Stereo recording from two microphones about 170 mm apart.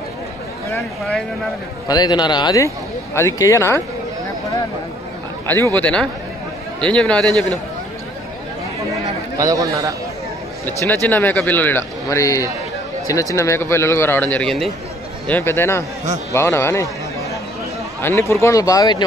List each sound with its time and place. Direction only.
1.9 s a man's voice: 25° left (ahead or behind)
5.8 s a man's voice: 5° left (ahead or behind)
9.4 s a man's voice: 20° right (ahead or behind)
10.6 s a man's voice: 10° left (ahead or behind)
18.0 s speech: 15° left (ahead or behind)